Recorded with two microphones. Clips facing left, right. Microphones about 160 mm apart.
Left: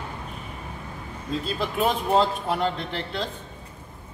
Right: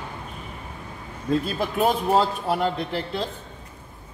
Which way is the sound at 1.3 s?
45° right (ahead or behind).